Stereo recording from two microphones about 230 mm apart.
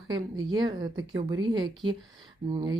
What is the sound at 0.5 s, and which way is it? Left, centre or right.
Speech, centre.